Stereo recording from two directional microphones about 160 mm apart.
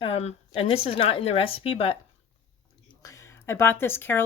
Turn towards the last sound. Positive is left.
turn(degrees=15)  # may be behind; listen again after turning